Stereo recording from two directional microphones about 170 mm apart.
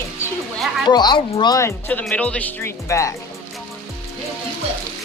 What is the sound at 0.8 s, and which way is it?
Speech, 25° left (ahead or behind).